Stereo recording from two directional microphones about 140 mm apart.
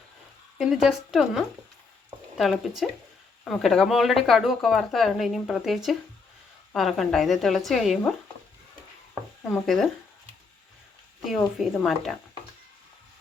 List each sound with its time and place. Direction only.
0.6 s speech: 5° right (ahead or behind)
9.4 s speech: centre (ahead or behind)
11.3 s speech: centre (ahead or behind)